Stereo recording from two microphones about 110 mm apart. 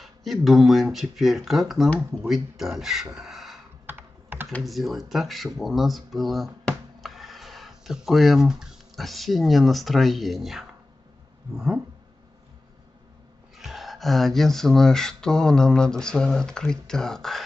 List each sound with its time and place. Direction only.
0.0 s speech: centre (ahead or behind)
3.2 s crow: 5° right (ahead or behind)
3.8 s computer keyboard: 20° right (ahead or behind)
4.6 s speech: centre (ahead or behind)
11.5 s a sound: 5° right (ahead or behind)
13.6 s speech: centre (ahead or behind)